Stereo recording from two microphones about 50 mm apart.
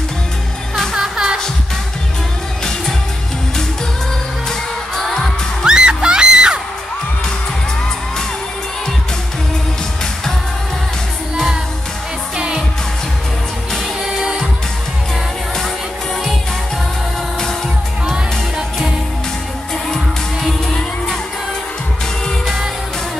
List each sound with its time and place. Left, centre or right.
0.9 s music: centre
4.5 s music: centre
5.7 s music: centre
12.4 s music: centre